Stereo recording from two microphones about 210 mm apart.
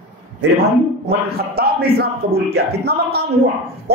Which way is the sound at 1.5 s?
45° right (ahead or behind).